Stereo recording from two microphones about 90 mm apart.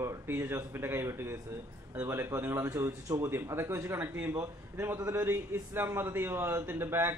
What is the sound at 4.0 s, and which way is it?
Speech, 20° right (ahead or behind).